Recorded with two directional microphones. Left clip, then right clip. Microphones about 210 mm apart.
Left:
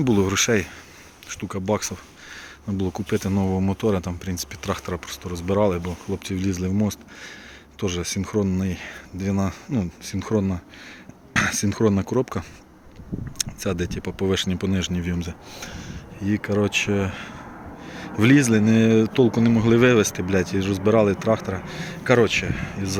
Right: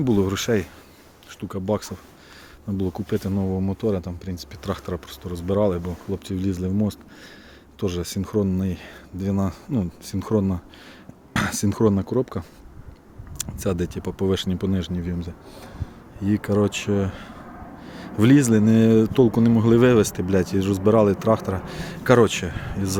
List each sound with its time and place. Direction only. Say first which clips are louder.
0.0 s speech: left 2 dB; 5° right (ahead or behind)
13.4 s speech: even; 15° right (ahead or behind); by 16.0 s centre (ahead or behind)
16.2 s speech: right 1 dB; 20° right (ahead or behind)